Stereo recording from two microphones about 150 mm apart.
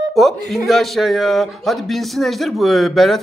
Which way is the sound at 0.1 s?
Centre (ahead or behind).